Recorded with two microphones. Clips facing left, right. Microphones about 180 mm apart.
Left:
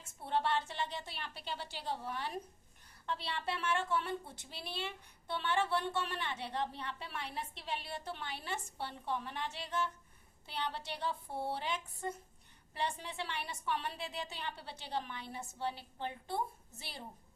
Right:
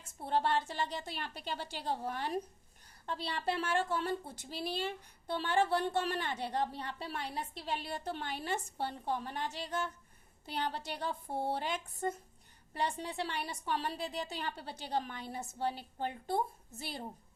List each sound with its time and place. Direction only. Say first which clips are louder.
0.3 s a woman's voice: right 2 dB; 40° right (ahead or behind)